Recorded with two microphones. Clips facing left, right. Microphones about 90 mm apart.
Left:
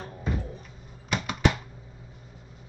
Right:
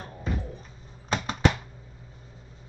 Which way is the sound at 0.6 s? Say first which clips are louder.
Left 1 dB; 35° right (ahead or behind).